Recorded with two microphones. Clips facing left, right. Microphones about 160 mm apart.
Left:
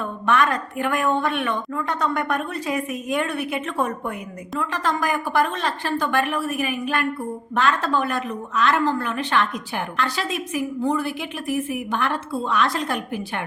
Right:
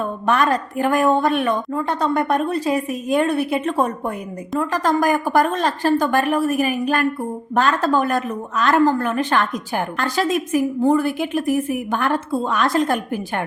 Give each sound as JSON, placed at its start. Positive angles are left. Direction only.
{"t": 0.0, "sound": "a woman's voice", "side_deg": -35}